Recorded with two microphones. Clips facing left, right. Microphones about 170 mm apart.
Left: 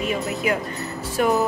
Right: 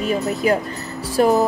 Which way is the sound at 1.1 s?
35° right (ahead or behind).